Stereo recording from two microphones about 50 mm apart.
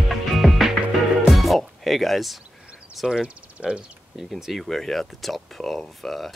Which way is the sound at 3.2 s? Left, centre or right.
Right.